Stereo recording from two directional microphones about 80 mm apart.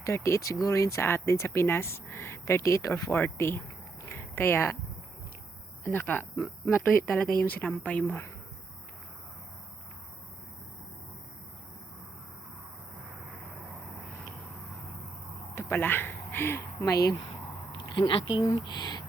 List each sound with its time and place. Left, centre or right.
0.0 s speech: left
4.0 s a sound: left
5.8 s speech: left
15.5 s speech: left
16.8 s speech: left
17.7 s speech: left
18.6 s speech: left